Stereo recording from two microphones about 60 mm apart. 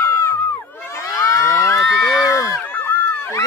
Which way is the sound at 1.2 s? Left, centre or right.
Left.